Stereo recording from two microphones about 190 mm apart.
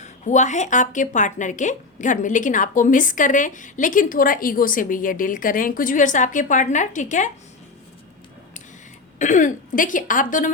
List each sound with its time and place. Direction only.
0.0 s speech: 40° left (ahead or behind)
9.1 s speech: 40° left (ahead or behind)